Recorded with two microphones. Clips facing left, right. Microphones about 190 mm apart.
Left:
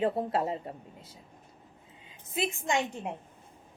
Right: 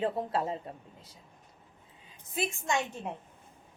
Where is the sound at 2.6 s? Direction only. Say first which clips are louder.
Left 2 dB; 15° left (ahead or behind).